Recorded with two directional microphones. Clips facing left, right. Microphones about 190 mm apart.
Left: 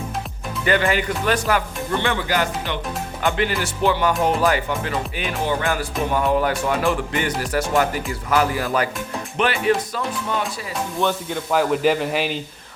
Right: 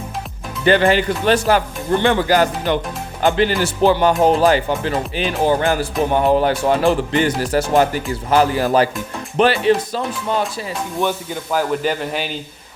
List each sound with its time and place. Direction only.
0.6 s music: 30° right (ahead or behind)
11.0 s a man's voice: centre (ahead or behind)